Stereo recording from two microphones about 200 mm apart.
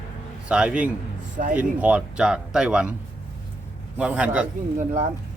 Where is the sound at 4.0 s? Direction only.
5° right (ahead or behind).